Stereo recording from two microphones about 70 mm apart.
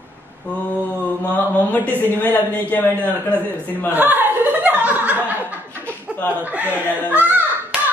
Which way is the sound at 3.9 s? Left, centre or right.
Right.